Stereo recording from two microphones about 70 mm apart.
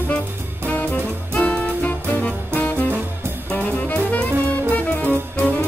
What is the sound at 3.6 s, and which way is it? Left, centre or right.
Jazz, left.